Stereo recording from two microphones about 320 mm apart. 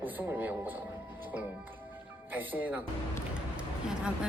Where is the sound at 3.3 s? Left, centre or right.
Centre.